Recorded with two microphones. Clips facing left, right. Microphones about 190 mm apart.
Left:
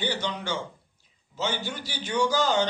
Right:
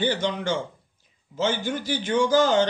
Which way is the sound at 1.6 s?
50° right (ahead or behind).